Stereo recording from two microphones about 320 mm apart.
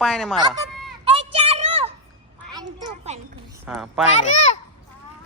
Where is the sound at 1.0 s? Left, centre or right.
Centre.